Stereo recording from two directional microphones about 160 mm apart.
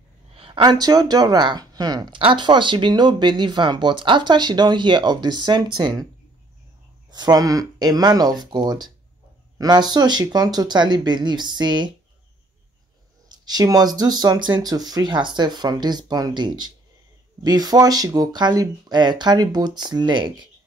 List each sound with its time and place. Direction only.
0.6 s speech: 25° right (ahead or behind)
7.1 s speech: 25° right (ahead or behind)
13.3 s speech: 25° right (ahead or behind)